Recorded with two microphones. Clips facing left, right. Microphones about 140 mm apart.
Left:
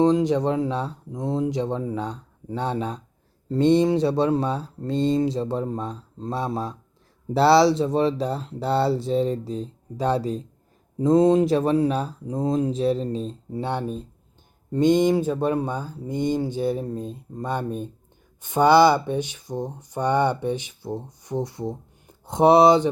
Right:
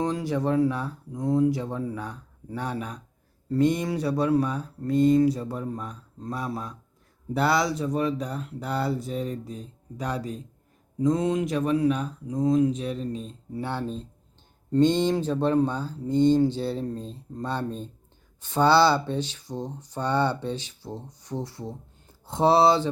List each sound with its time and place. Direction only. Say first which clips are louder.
0.0 s speech: left 7 dB; 20° left (ahead or behind)